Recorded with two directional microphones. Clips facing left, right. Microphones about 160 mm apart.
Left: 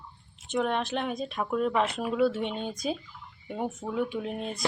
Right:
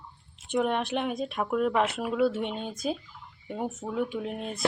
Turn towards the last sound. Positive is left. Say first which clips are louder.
# even
turn(degrees=0)  # may be behind; listen again after turning